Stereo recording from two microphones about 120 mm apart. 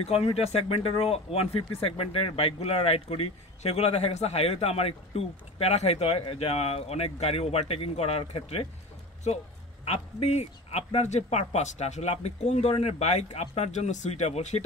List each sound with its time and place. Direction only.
0.0 s speech: 55° left (ahead or behind)
9.8 s speech: 65° left (ahead or behind)